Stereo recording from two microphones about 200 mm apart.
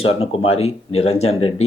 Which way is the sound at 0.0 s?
30° left (ahead or behind).